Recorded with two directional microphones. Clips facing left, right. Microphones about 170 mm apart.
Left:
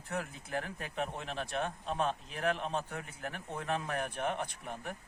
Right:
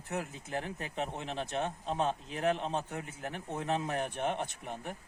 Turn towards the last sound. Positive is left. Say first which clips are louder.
# right 1 dB
turn(degrees=-20)  # may be behind; listen again after turning